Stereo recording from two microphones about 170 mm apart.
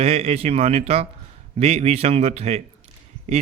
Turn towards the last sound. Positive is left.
turn(degrees=25)  # may be behind; listen again after turning